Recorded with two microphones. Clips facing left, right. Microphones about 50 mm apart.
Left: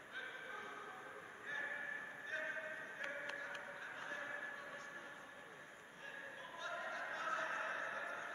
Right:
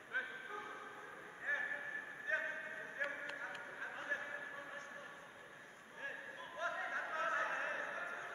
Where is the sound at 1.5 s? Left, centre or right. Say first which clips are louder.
Right 4 dB; right.